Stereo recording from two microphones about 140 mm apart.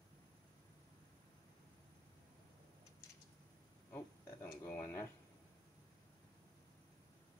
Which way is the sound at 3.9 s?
15° left (ahead or behind).